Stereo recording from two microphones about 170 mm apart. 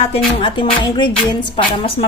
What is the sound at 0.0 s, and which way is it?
Music, 35° left (ahead or behind).